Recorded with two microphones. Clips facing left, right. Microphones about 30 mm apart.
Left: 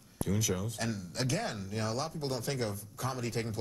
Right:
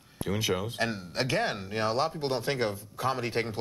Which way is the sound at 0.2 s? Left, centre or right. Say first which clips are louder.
Right 4 dB; right.